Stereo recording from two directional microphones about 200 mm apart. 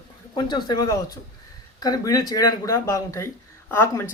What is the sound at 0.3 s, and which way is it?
Speech, 20° left (ahead or behind).